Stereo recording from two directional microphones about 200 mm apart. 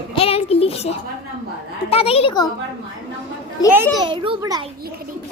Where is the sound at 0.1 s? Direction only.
30° left (ahead or behind).